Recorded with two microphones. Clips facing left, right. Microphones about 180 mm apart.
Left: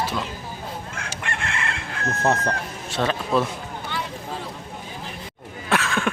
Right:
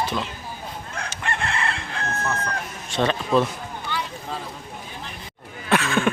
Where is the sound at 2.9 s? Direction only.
5° left (ahead or behind).